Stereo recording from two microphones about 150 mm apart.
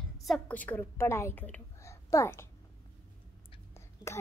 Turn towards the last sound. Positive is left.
turn(degrees=20)  # may be behind; listen again after turning